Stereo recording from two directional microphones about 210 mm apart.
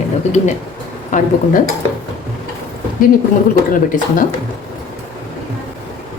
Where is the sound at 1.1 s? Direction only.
35° left (ahead or behind).